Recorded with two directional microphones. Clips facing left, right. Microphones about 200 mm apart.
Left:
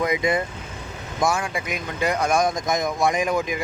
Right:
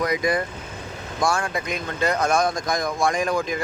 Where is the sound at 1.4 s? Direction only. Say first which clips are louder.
Right 1 dB; 10° left (ahead or behind).